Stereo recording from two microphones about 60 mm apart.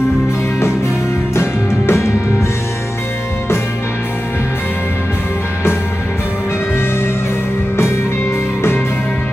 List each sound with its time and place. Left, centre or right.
1.3 s music: left